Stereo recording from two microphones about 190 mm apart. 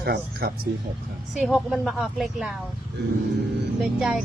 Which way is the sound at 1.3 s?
Centre (ahead or behind).